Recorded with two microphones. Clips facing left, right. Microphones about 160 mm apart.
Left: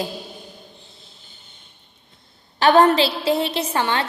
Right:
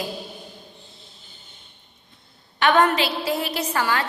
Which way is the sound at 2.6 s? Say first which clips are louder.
Left 4 dB; 30° left (ahead or behind).